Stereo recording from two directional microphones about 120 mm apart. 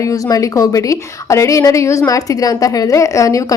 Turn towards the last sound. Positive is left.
turn(degrees=25)  # may be behind; listen again after turning